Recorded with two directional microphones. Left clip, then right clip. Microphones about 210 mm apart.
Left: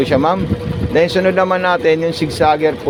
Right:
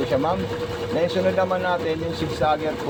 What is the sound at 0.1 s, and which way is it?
Speech, 55° left (ahead or behind).